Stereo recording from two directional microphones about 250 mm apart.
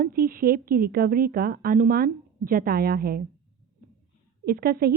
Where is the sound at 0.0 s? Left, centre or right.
Right.